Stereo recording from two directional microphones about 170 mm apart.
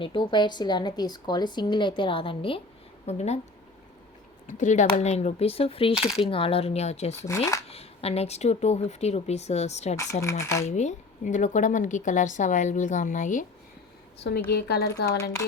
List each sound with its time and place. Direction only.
0.0 s a woman's voice: 30° left (ahead or behind)
4.4 s speech: 45° left (ahead or behind)
5.9 s coin: 5° right (ahead or behind)
6.2 s speech: 35° left (ahead or behind)
7.2 s speech: 15° left (ahead or behind)
7.7 s speech: 35° left (ahead or behind)
10.0 s speech: 15° left (ahead or behind)
10.7 s a woman's voice: 45° left (ahead or behind)
14.5 s speech: 70° left (ahead or behind)